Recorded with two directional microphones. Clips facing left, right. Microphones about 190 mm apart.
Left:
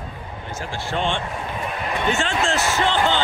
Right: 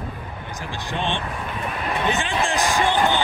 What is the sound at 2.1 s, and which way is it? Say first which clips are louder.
Basketball bounce: left 3 dB; 15° right (ahead or behind).